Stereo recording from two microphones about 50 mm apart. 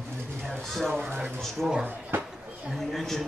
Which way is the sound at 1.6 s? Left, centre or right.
Centre.